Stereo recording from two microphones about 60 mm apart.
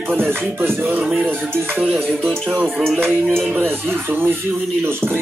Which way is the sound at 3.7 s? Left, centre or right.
Right.